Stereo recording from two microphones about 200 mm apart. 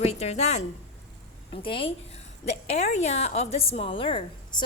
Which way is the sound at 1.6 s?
25° left (ahead or behind).